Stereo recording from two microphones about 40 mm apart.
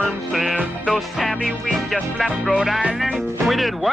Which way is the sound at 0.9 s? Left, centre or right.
Centre.